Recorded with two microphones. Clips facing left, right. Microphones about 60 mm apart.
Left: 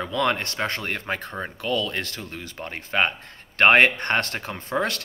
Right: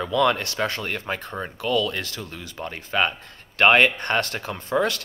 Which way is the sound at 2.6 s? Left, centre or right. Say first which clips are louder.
Even; left.